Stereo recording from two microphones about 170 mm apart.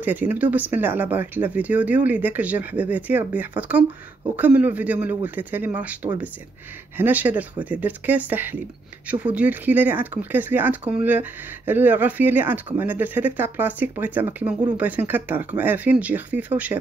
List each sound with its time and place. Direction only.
0.0 s speech: 10° right (ahead or behind)
7.0 s speech: 10° right (ahead or behind)